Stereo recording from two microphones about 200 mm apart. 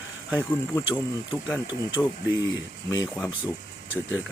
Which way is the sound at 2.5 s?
20° left (ahead or behind).